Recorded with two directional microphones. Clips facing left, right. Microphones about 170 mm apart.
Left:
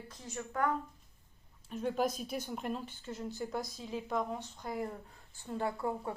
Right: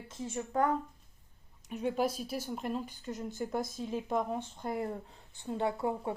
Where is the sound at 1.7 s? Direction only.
10° right (ahead or behind).